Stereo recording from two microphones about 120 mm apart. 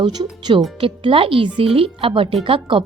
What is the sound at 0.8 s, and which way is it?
Speech, 50° right (ahead or behind).